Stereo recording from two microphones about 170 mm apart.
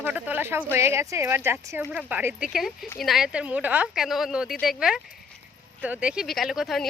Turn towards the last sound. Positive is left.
turn(degrees=0)  # may be behind; listen again after turning